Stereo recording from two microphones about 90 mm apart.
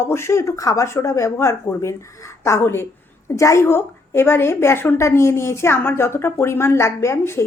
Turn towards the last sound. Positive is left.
turn(degrees=30)  # may be behind; listen again after turning